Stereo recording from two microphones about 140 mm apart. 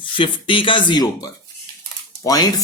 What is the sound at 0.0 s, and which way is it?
Speech, 35° left (ahead or behind).